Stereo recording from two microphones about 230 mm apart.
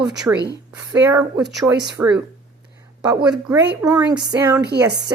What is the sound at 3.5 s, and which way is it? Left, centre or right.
Speech, centre.